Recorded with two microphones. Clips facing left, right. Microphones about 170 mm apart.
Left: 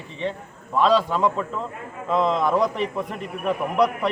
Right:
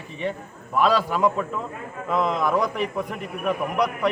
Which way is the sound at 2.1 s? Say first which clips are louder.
Left 2 dB; 25° left (ahead or behind).